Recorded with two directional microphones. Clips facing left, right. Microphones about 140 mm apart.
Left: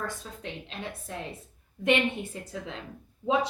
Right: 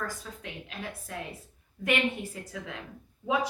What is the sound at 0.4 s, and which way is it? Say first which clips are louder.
A woman's voice: left 3 dB; 25° left (ahead or behind).